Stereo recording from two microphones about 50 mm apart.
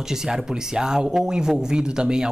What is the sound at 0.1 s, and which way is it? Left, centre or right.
Speech, centre.